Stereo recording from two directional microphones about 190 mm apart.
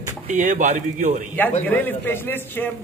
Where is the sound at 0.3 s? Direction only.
40° right (ahead or behind).